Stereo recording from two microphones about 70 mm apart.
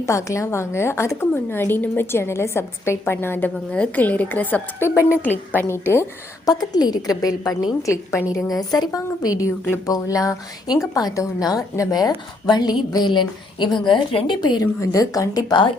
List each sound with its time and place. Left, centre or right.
0.0 s a woman's voice: left
3.7 s speech: left
4.8 s a woman's voice: left
5.2 s speech: left
5.6 s a woman's voice: left
6.4 s a woman's voice: left
7.9 s a woman's voice: left
8.4 s a woman's voice: left
14.8 s a woman's voice: left